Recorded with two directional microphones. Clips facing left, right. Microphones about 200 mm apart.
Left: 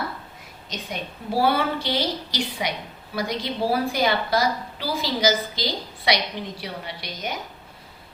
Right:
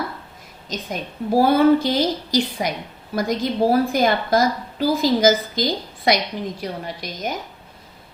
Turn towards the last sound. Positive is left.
turn(degrees=-45)  # may be behind; listen again after turning